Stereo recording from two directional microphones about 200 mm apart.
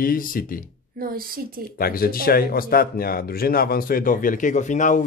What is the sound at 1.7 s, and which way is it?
Speech, 50° left (ahead or behind).